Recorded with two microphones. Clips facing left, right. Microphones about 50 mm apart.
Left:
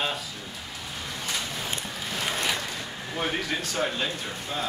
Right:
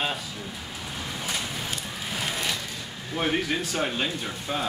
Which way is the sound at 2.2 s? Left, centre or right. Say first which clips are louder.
Left 2 dB; centre.